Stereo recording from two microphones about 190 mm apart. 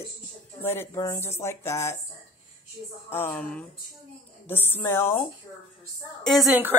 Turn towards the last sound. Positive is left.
turn(degrees=-5)  # may be behind; listen again after turning